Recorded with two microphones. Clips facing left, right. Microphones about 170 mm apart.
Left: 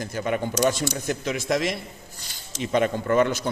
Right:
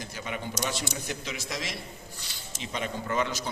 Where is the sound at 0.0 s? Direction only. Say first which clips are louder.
Left 10 dB; 50° left (ahead or behind).